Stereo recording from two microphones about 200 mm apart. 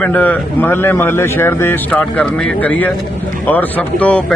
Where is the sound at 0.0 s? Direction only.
10° left (ahead or behind).